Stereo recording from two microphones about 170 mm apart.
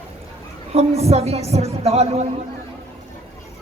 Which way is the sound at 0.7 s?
40° right (ahead or behind).